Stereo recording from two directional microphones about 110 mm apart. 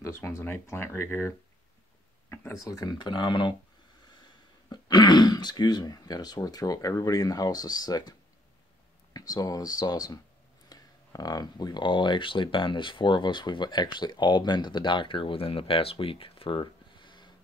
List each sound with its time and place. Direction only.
0.0 s speech: 25° left (ahead or behind)
2.2 s a sound: 20° left (ahead or behind)
2.6 s speech: 35° left (ahead or behind)
4.6 s speech: 40° left (ahead or behind)